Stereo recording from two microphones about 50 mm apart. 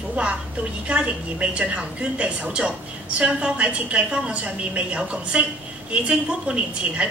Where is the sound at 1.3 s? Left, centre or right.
Right.